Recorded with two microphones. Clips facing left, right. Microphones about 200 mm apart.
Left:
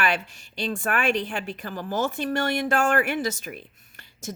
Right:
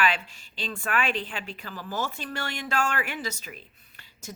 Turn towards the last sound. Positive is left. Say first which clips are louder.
# left 7 dB
turn(degrees=45)  # may be behind; listen again after turning